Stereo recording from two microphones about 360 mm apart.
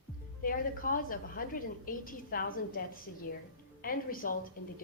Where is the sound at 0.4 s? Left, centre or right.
Left.